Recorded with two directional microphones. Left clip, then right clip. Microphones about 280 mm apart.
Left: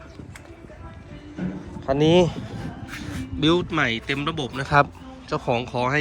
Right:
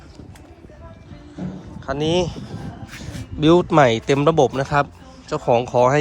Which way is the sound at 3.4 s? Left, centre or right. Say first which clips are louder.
Right 7 dB; centre.